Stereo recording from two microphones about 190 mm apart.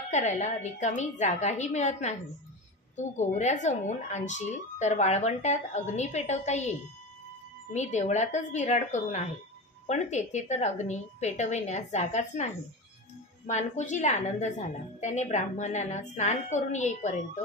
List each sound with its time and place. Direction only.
0.1 s speech: 40° left (ahead or behind)
3.2 s speech: 35° left (ahead or behind)
13.5 s speech: 40° left (ahead or behind)